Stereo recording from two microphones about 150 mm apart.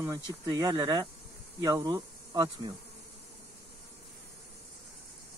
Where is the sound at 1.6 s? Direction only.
25° right (ahead or behind).